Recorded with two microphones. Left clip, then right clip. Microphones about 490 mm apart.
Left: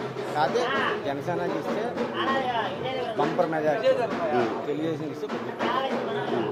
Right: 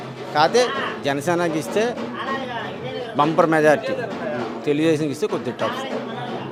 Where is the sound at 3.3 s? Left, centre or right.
Right.